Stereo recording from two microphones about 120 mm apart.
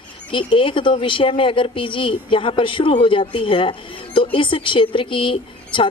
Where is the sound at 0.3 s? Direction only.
45° left (ahead or behind).